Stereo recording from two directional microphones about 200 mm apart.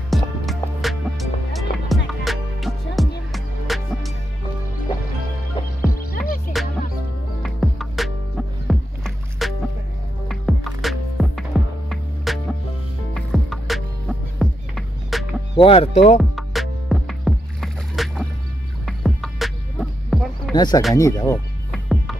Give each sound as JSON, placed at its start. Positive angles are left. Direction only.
{"t": 0.1, "sound": "music", "side_deg": 0}
{"t": 5.9, "sound": "music", "side_deg": 45}
{"t": 7.4, "sound": "music", "side_deg": 0}
{"t": 15.5, "sound": "speech", "side_deg": 25}
{"t": 16.2, "sound": "music", "side_deg": 0}
{"t": 20.5, "sound": "speech", "side_deg": 20}
{"t": 21.7, "sound": "music", "side_deg": 0}